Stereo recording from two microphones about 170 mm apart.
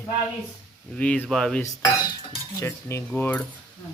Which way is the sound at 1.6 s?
25° left (ahead or behind).